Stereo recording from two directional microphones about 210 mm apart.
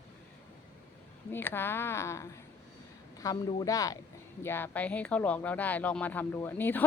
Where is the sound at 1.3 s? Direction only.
10° left (ahead or behind).